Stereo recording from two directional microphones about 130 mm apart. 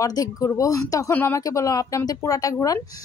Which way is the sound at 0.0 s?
25° left (ahead or behind).